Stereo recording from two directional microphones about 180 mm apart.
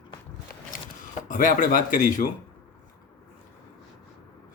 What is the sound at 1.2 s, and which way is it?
Speech, 45° left (ahead or behind).